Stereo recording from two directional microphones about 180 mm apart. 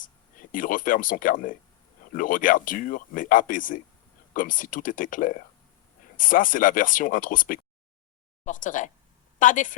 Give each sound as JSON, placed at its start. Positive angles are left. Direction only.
{"t": 0.0, "sound": "speech", "side_deg": 50}